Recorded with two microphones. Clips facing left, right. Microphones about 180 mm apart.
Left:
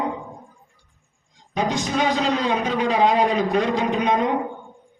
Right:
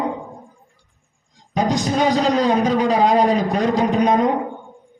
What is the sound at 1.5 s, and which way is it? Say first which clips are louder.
A man's voice: right 4 dB; 35° right (ahead or behind).